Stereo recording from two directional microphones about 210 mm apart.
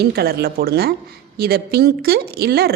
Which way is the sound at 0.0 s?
50° right (ahead or behind).